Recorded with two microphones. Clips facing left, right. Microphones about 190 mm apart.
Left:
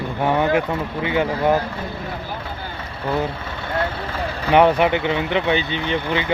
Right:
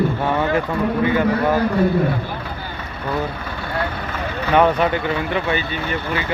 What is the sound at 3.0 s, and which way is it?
Vehicle, 25° left (ahead or behind).